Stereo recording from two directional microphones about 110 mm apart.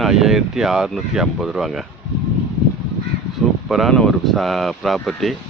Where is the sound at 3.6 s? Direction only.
Centre (ahead or behind).